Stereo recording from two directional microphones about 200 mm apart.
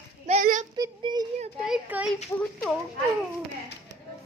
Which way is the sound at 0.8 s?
20° right (ahead or behind).